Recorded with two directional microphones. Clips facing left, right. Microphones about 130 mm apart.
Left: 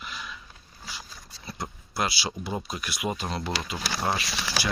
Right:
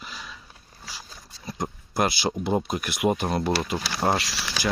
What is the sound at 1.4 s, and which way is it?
Speech, 45° right (ahead or behind).